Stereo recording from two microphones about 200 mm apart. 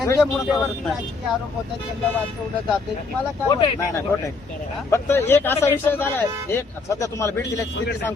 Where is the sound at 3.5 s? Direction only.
25° left (ahead or behind).